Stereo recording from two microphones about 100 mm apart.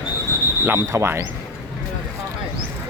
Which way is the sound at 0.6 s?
25° right (ahead or behind).